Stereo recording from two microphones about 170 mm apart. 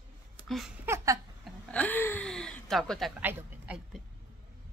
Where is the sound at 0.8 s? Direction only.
15° right (ahead or behind).